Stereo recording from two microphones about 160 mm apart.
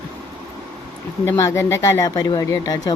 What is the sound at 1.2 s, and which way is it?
Speech, 20° left (ahead or behind).